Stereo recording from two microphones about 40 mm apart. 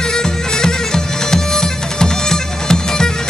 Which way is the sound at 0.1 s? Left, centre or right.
Centre.